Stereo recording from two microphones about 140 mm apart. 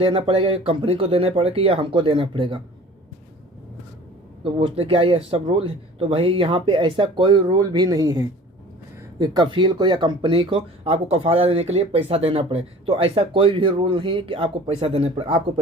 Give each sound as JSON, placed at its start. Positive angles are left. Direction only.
{"t": 0.0, "sound": "speech", "side_deg": -40}
{"t": 4.5, "sound": "speech", "side_deg": -45}